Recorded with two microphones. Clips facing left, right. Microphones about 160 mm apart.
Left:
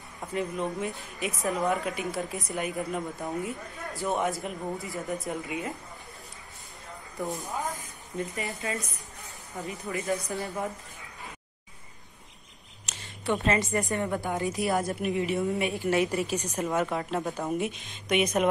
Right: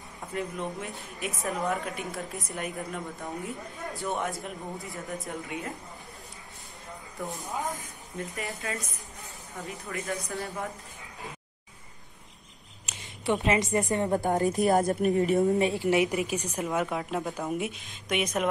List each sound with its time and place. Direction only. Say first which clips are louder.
0.3 s a woman's voice: left 3 dB; centre (ahead or behind)
7.2 s a woman's voice: left 2 dB; centre (ahead or behind)
9.8 s a woman's voice: left 4 dB; 20° left (ahead or behind)
10.3 s a woman's voice: left 2 dB; centre (ahead or behind)
13.2 s a woman's voice: right 1 dB; 20° right (ahead or behind)
14.1 s a woman's voice: right 4 dB; 40° right (ahead or behind)
15.9 s a woman's voice: right 1 dB; 20° right (ahead or behind)
16.6 s a woman's voice: left 2 dB; centre (ahead or behind)